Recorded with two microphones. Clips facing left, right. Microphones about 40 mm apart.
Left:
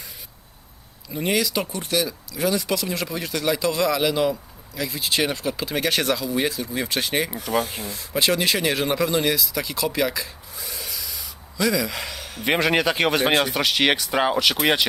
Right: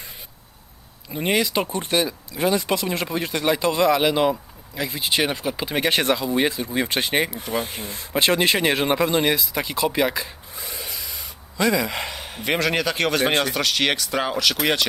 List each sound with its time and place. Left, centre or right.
1.1 s speech: right
12.5 s speech: centre